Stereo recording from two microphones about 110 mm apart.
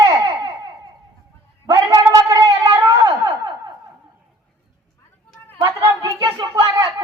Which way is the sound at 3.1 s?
35° right (ahead or behind).